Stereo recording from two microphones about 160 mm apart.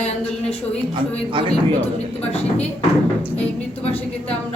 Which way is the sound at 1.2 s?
30° right (ahead or behind).